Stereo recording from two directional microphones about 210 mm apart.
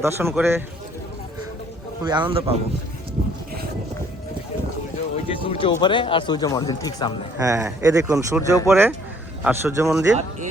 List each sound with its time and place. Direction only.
0.0 s speech: 10° right (ahead or behind)
2.0 s speech: 20° right (ahead or behind)
5.1 s speech: 25° left (ahead or behind)
7.3 s speech: 15° right (ahead or behind)